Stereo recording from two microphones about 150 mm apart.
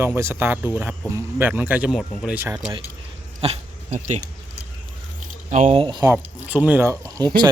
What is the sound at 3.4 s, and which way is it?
Speech, 40° right (ahead or behind).